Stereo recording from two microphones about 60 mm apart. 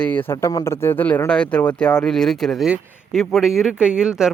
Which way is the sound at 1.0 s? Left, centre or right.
Left.